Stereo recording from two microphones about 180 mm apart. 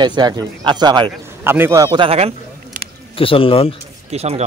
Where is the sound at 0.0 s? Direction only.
25° right (ahead or behind).